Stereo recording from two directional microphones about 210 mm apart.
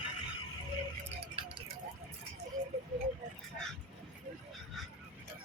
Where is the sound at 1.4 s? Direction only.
25° right (ahead or behind).